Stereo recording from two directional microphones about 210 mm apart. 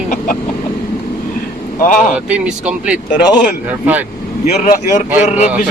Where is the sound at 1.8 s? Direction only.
40° left (ahead or behind).